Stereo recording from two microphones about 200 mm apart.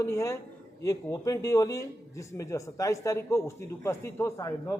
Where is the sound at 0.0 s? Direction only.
15° left (ahead or behind).